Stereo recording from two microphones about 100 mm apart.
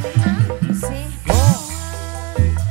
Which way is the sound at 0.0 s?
20° right (ahead or behind).